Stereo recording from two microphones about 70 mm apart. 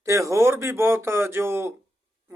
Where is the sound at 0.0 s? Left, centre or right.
Right.